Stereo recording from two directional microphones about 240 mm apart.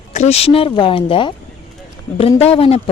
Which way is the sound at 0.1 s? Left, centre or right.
Left.